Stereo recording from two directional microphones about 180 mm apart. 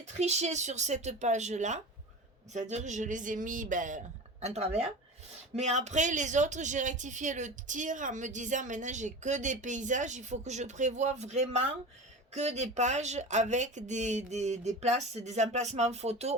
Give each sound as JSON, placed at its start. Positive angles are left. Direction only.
{"t": 0.0, "sound": "speech", "side_deg": -40}